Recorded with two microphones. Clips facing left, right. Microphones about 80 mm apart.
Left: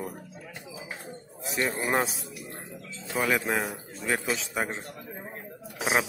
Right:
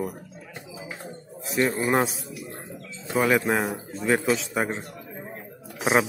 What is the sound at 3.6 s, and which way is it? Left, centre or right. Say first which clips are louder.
Speech: right 5 dB; centre.